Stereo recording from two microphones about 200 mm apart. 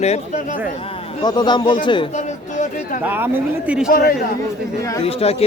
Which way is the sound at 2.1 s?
35° left (ahead or behind).